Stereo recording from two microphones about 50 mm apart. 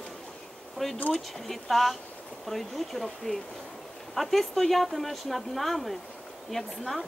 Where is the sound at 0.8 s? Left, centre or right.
Centre.